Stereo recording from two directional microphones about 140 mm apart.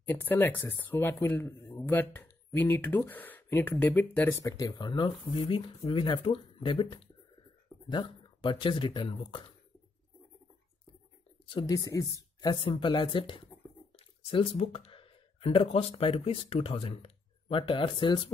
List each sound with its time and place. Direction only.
0.1 s speech: 15° left (ahead or behind); by 9.4 s 35° left (ahead or behind)
11.4 s speech: 30° left (ahead or behind)
12.5 s speech: 40° left (ahead or behind)